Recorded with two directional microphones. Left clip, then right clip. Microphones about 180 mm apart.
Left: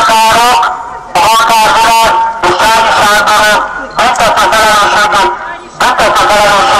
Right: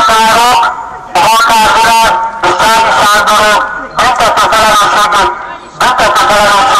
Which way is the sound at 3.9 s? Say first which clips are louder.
Even; 25° left (ahead or behind).